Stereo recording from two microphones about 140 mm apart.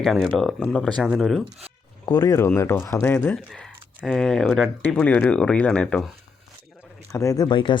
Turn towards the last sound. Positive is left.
turn(degrees=35)  # may be behind; listen again after turning